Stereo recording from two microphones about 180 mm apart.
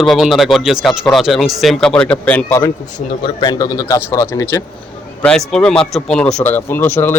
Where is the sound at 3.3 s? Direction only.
20° left (ahead or behind).